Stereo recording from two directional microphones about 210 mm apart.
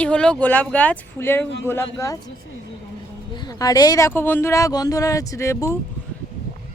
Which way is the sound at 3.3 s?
20° left (ahead or behind).